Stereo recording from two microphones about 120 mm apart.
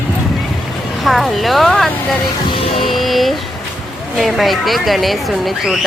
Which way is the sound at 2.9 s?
Centre (ahead or behind).